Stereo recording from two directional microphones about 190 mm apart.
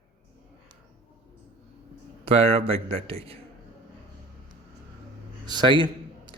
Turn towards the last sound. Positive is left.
turn(degrees=-25)  # may be behind; listen again after turning